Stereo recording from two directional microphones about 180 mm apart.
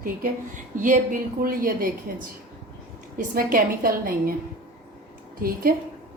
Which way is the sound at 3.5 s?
55° right (ahead or behind).